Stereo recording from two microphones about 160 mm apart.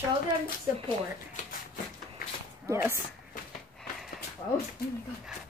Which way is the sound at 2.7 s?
15° right (ahead or behind).